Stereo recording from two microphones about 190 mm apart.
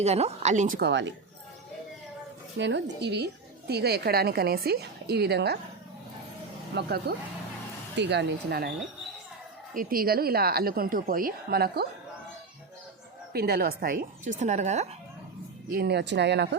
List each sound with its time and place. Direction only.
0.0 s speech: 35° right (ahead or behind)
0.8 s a woman's voice: 65° right (ahead or behind)
2.6 s a woman's voice: 70° right (ahead or behind)
6.7 s a woman's voice: 60° right (ahead or behind)
7.9 s a woman's voice: 65° right (ahead or behind)
9.7 s speech: 50° right (ahead or behind)
13.3 s speech: 55° right (ahead or behind); by 14.8 s 35° right (ahead or behind)
15.7 s a woman's voice: 60° right (ahead or behind)